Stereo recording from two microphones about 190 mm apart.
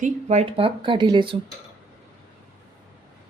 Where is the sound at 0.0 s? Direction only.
35° right (ahead or behind).